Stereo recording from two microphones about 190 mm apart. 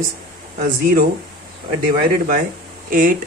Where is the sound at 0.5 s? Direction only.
50° right (ahead or behind).